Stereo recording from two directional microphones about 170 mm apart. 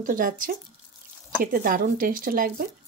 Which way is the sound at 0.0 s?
55° right (ahead or behind).